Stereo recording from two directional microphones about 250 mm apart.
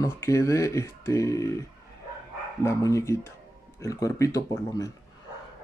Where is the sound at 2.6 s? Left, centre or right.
Centre.